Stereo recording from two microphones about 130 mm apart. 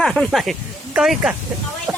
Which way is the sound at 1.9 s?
5° right (ahead or behind).